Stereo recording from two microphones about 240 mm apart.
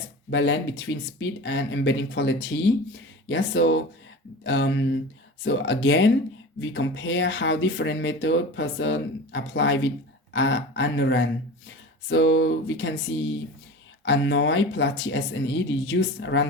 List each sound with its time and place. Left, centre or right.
0.3 s speech: left